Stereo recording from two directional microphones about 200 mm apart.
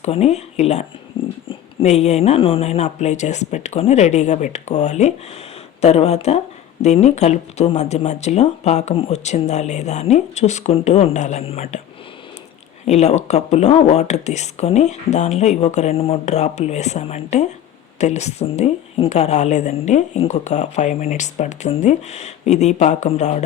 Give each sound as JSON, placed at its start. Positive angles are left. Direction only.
{"t": 0.0, "sound": "a woman's voice", "side_deg": 30}
{"t": 12.9, "sound": "a woman's voice", "side_deg": 35}